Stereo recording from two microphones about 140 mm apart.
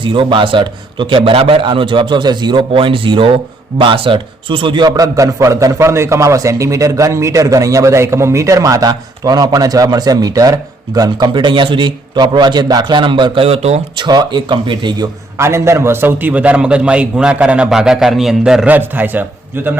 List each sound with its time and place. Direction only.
0.0 s a man's voice: 35° right (ahead or behind)
13.9 s a man's voice: 30° right (ahead or behind)
15.4 s a man's voice: 20° right (ahead or behind)